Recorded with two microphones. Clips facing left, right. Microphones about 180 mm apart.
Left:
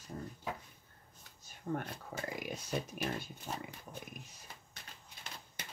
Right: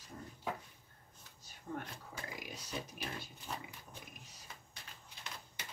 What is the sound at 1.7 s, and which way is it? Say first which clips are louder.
Speech: left 6 dB; 50° left (ahead or behind).